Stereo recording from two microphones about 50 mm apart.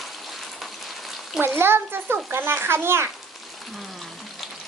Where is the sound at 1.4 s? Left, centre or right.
Right.